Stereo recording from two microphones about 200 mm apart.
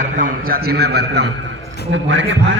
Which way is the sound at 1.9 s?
65° right (ahead or behind).